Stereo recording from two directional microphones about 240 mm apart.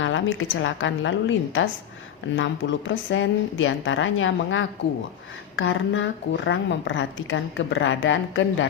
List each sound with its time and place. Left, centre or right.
0.0 s a woman's voice: left